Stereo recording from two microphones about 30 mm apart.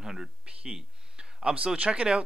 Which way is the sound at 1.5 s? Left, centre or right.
Right.